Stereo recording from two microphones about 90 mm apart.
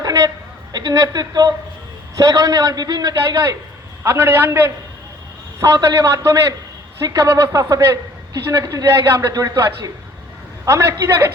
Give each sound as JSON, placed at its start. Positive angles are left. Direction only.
{"t": 0.0, "sound": "a sound", "side_deg": -50}
{"t": 0.7, "sound": "a man's voice", "side_deg": -50}
{"t": 4.0, "sound": "a man's voice", "side_deg": -25}
{"t": 5.5, "sound": "a woman's voice", "side_deg": -35}